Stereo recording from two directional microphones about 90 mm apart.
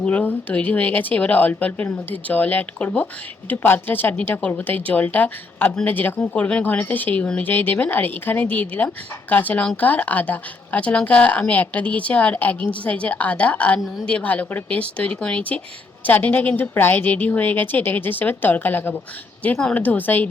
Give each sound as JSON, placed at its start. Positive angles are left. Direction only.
{"t": 0.0, "sound": "a woman's voice", "side_deg": 15}